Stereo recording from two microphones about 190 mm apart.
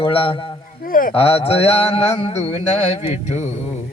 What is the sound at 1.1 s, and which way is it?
Speech, 30° left (ahead or behind).